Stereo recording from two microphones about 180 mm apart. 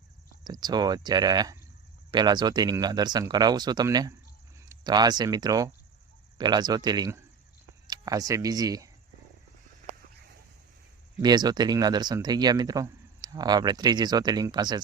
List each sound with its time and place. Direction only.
0.4 s speech: 25° right (ahead or behind)
11.2 s speech: 25° right (ahead or behind)